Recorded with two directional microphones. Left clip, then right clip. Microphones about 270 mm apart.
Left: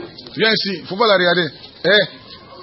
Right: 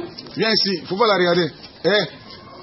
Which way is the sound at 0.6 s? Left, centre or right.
Left.